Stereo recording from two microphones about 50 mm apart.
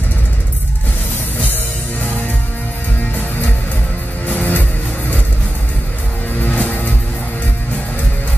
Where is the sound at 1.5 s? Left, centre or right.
Left.